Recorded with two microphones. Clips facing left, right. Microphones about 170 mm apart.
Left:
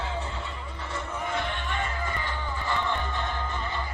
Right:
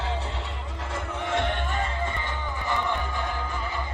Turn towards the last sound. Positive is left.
turn(degrees=-10)  # may be behind; listen again after turning